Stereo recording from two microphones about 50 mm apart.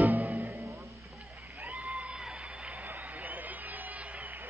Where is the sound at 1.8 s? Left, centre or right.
Right.